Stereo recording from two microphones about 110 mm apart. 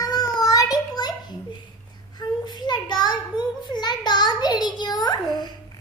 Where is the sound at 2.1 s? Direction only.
40° left (ahead or behind).